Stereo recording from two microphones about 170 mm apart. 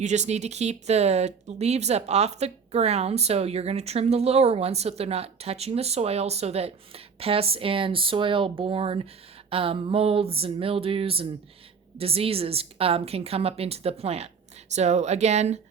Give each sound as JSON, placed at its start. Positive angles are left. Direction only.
{"t": 0.0, "sound": "speech", "side_deg": -40}